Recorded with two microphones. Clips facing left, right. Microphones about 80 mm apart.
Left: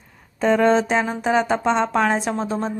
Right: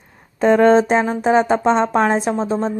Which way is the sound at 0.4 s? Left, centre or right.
Right.